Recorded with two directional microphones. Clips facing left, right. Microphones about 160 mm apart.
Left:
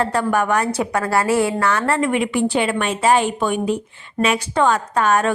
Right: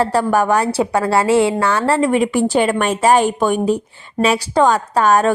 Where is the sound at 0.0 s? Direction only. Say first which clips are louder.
Right 3 dB; 35° right (ahead or behind).